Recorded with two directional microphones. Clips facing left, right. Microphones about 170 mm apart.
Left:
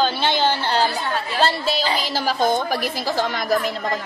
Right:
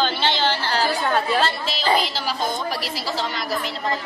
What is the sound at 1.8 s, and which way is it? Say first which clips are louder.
Speech: right 3 dB; 45° right (ahead or behind).